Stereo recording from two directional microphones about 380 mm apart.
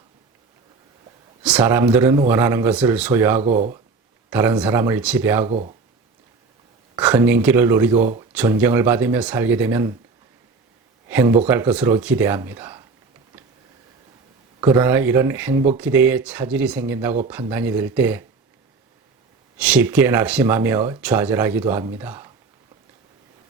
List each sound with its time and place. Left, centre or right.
1.4 s speech: centre
3.4 s speech: centre
4.3 s speech: centre
6.9 s speech: centre
11.1 s speech: centre
14.6 s speech: centre
19.5 s speech: centre